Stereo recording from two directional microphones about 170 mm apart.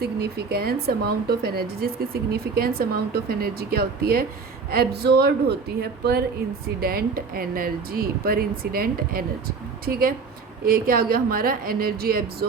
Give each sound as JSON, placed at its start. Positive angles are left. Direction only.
{"t": 0.0, "sound": "speech", "side_deg": -70}